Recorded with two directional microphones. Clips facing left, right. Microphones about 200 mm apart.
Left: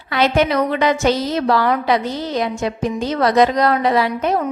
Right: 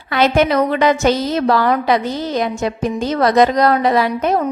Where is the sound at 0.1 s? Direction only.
50° right (ahead or behind).